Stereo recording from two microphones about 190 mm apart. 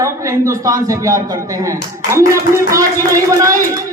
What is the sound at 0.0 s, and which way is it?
A man's voice, 15° right (ahead or behind).